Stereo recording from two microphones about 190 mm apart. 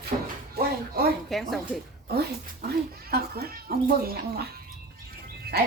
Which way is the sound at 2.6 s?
55° right (ahead or behind).